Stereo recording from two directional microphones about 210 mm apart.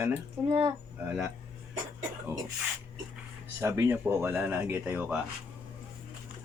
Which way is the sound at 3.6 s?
15° right (ahead or behind).